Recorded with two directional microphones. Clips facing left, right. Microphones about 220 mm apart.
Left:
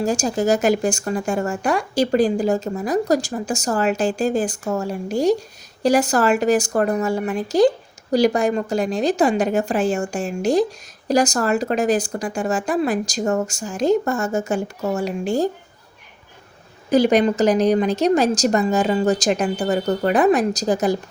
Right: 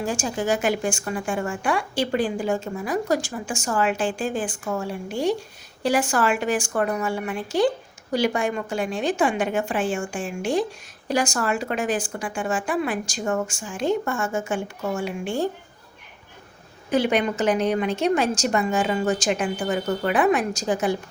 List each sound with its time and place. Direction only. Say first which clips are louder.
0.0 s speech: left 6 dB; 40° left (ahead or behind)
16.9 s speech: left 6 dB; 40° left (ahead or behind)